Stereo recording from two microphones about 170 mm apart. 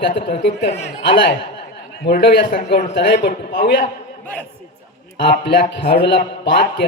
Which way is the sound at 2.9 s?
80° left.